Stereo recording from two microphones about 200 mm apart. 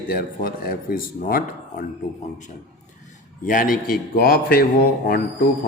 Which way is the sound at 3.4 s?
45° left (ahead or behind).